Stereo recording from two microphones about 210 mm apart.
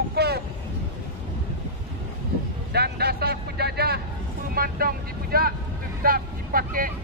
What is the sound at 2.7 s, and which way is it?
Speech, 50° right (ahead or behind).